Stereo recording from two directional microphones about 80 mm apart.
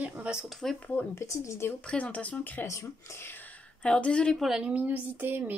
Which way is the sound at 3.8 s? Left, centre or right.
Centre.